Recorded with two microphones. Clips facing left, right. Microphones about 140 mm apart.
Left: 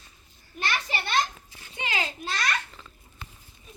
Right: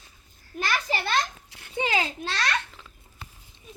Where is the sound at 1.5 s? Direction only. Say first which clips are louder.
Even; 65° right (ahead or behind).